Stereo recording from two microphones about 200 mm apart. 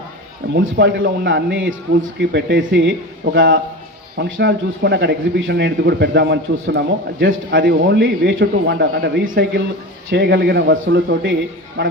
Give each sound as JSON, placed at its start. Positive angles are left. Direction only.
{"t": 0.5, "sound": "a man's voice", "side_deg": -65}
{"t": 4.2, "sound": "speech", "side_deg": -60}
{"t": 7.6, "sound": "speech", "side_deg": -55}